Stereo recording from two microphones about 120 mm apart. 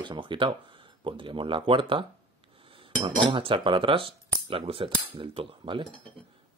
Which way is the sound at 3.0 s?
45° right (ahead or behind).